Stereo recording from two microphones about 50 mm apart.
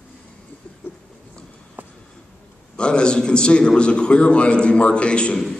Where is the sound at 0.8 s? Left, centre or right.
Left.